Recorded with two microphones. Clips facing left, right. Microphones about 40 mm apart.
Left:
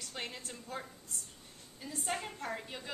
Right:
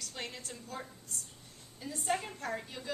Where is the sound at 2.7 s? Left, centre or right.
Centre.